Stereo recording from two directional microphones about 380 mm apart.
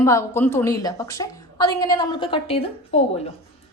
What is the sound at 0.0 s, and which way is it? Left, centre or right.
A woman's voice, centre.